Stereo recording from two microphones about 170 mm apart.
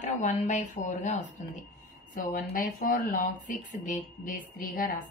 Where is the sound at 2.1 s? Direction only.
55° left (ahead or behind).